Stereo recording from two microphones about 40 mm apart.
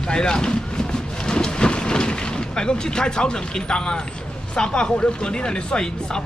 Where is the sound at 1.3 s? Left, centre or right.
Centre.